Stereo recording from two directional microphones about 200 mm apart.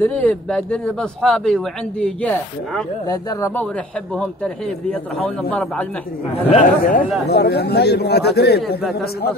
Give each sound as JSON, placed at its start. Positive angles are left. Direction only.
{"t": 0.0, "sound": "speech", "side_deg": 10}
{"t": 3.1, "sound": "speech", "side_deg": 20}
{"t": 4.1, "sound": "speech", "side_deg": 5}
{"t": 6.5, "sound": "a man's voice", "side_deg": 40}